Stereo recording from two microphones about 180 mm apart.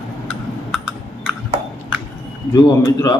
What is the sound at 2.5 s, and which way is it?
Speech, 20° left (ahead or behind).